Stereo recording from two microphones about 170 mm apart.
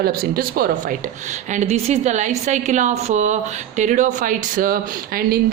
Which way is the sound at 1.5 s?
40° right (ahead or behind).